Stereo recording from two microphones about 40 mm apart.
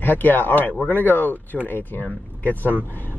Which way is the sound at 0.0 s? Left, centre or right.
Left.